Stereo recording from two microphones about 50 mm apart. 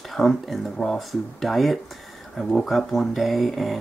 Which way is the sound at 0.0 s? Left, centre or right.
Centre.